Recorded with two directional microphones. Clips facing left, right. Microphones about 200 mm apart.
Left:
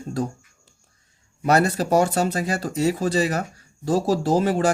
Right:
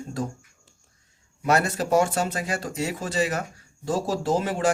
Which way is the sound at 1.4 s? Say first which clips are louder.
Left 4 dB; 35° left (ahead or behind).